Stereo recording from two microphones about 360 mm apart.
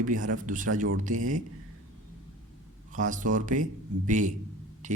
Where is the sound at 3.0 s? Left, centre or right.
Right.